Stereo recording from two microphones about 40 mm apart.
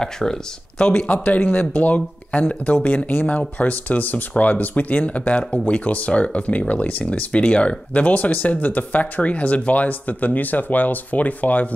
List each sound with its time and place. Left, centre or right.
0.0 s speech: centre
0.9 s speech: left
7.9 s speech: left